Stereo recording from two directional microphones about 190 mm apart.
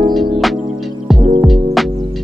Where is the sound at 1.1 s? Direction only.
35° right (ahead or behind).